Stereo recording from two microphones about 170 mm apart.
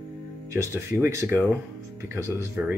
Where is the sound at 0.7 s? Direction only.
15° right (ahead or behind).